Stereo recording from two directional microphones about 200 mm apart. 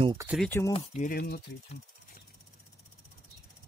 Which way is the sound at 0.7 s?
30° left (ahead or behind).